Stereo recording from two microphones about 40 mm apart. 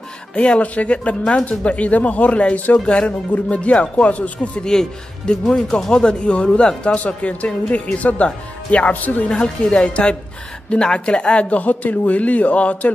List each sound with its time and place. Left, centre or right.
0.3 s speech: left
4.6 s speech: left
9.3 s speech: left